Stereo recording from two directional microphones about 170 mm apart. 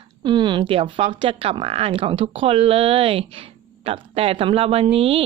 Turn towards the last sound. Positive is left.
turn(degrees=-35)  # may be behind; listen again after turning